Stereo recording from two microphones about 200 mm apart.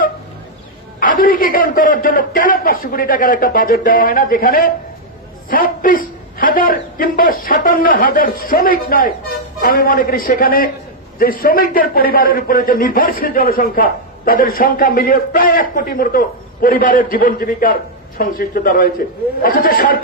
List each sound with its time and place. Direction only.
0.9 s a man's voice: 45° left (ahead or behind)